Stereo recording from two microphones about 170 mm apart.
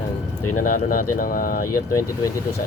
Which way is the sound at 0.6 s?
50° left (ahead or behind).